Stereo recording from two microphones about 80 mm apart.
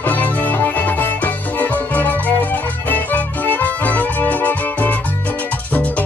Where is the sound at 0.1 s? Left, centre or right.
Left.